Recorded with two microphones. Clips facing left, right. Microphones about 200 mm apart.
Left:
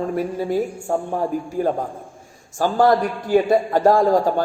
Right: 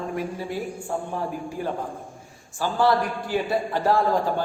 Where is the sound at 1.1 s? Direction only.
45° left (ahead or behind).